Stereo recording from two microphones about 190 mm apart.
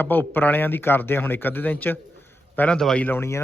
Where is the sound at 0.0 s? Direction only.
10° left (ahead or behind).